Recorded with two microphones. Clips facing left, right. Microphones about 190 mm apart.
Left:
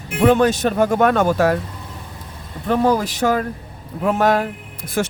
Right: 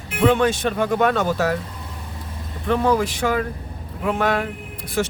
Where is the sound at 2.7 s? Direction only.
35° left (ahead or behind).